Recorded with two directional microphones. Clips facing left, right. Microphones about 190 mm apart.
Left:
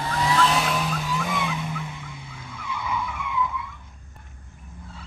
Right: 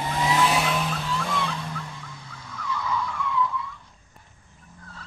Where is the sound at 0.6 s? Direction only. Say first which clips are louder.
Even; centre (ahead or behind); by 3.5 s 15° left (ahead or behind).